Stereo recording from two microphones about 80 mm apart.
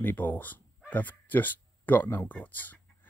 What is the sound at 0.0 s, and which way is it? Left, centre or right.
Speech, left.